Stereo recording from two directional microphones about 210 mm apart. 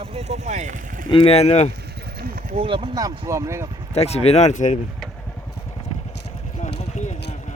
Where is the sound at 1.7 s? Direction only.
50° right (ahead or behind).